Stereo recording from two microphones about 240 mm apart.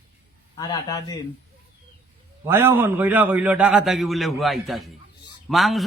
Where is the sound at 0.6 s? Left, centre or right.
Centre.